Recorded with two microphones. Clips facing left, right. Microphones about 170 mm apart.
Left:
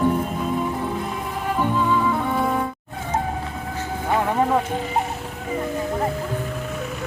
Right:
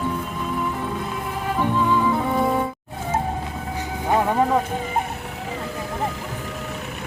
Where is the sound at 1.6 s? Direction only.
Centre (ahead or behind).